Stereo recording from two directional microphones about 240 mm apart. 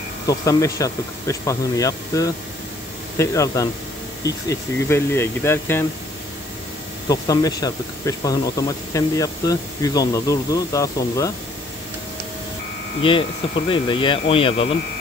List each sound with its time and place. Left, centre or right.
0.3 s speech: centre
7.1 s speech: centre
13.7 s speech: left